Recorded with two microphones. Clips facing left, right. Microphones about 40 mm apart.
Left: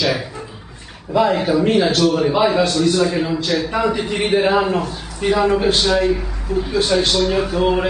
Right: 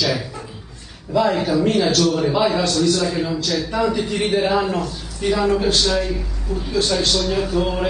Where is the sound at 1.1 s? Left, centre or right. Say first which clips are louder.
Left 2 dB; centre.